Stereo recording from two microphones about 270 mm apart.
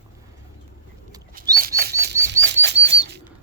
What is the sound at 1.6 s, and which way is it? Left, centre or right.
Bird, right.